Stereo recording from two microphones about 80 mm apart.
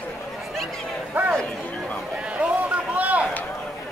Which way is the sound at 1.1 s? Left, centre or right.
Right.